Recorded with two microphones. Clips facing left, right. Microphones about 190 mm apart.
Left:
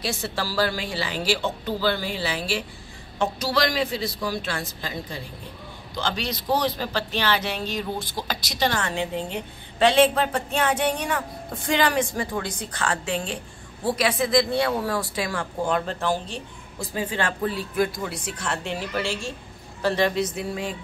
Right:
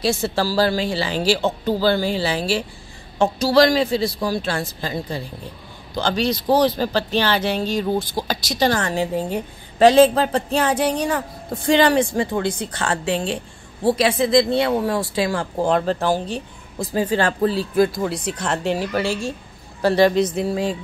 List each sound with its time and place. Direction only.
0.0 s a woman's voice: 30° right (ahead or behind)